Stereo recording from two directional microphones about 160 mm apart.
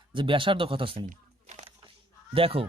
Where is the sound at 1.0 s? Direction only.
50° right (ahead or behind).